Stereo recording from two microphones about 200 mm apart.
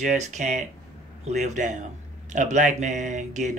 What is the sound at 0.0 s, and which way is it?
A man's voice, 35° right (ahead or behind).